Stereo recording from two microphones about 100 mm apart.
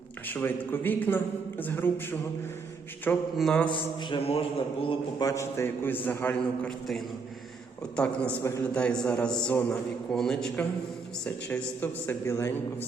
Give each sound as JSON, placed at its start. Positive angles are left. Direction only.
{"t": 0.3, "sound": "a man's voice", "side_deg": 20}
{"t": 3.3, "sound": "a man's voice", "side_deg": 5}
{"t": 3.7, "sound": "a sound", "side_deg": 50}
{"t": 4.2, "sound": "a man's voice", "side_deg": 75}
{"t": 5.2, "sound": "a man's voice", "side_deg": 30}
{"t": 7.9, "sound": "a man's voice", "side_deg": 10}